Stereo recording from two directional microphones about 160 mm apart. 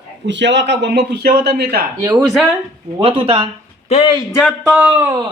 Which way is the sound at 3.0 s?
35° right (ahead or behind).